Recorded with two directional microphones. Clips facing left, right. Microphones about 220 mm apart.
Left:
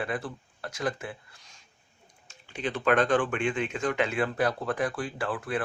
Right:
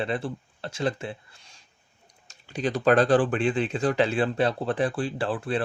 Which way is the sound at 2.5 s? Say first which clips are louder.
Right 4 dB; 40° right (ahead or behind).